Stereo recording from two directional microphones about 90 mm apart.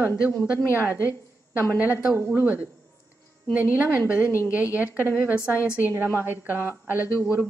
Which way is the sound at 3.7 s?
20° right (ahead or behind).